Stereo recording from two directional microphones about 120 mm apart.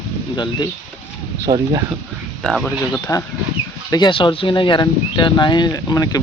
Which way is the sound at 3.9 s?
35° left (ahead or behind).